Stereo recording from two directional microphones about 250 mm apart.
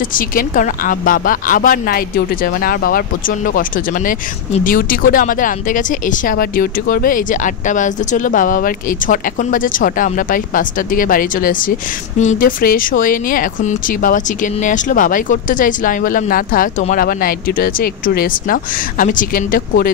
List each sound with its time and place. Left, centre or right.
0.1 s speech: left